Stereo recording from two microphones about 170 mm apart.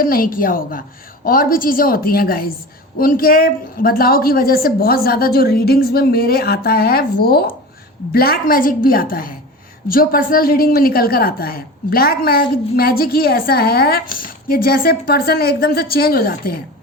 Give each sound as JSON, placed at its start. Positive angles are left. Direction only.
{"t": 0.0, "sound": "a woman's voice", "side_deg": 60}